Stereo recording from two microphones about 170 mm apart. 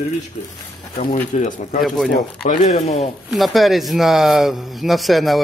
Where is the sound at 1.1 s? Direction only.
40° left (ahead or behind).